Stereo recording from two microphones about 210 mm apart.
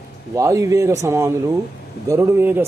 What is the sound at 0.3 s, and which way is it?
Speech, 15° right (ahead or behind).